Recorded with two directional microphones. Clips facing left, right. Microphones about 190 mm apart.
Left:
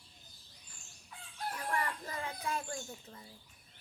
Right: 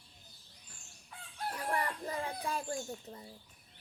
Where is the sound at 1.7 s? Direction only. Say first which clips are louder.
Right 2 dB; 30° right (ahead or behind).